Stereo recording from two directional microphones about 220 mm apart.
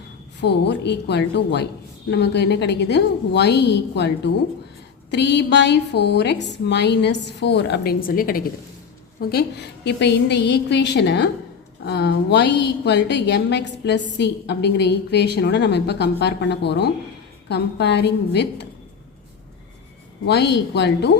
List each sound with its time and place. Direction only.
0.3 s a woman's voice: 50° left (ahead or behind)
20.2 s a woman's voice: 50° left (ahead or behind)